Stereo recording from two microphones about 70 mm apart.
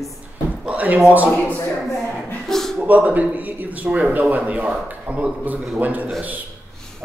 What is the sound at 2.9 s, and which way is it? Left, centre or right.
A man's voice, right.